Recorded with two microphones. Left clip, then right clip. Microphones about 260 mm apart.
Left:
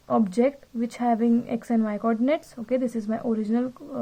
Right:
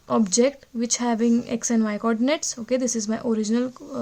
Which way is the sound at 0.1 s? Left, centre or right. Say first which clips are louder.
Right 2 dB; right.